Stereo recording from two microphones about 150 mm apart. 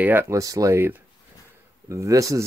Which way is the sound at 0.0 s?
15° right (ahead or behind).